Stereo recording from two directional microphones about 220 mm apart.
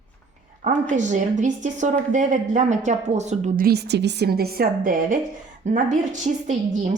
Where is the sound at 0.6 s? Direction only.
35° right (ahead or behind).